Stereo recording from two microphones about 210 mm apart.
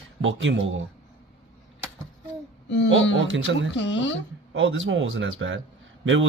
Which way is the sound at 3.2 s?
65° right (ahead or behind).